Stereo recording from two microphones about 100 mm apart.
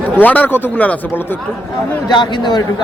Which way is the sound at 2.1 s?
50° left (ahead or behind).